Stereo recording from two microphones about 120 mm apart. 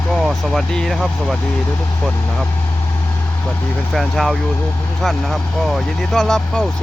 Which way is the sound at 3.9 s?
Centre (ahead or behind).